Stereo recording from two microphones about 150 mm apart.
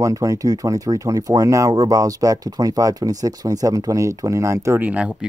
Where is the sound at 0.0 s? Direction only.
20° right (ahead or behind).